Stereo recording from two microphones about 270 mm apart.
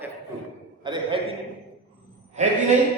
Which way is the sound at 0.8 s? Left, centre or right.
Centre.